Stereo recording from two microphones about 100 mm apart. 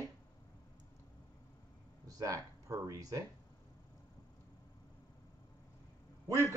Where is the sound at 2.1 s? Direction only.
35° right (ahead or behind).